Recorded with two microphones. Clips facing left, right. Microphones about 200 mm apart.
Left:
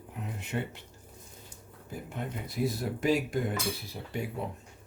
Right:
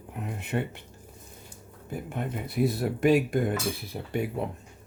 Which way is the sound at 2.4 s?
60° right (ahead or behind).